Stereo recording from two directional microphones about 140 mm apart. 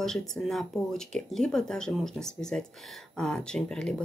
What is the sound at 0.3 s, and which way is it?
Speech, centre (ahead or behind).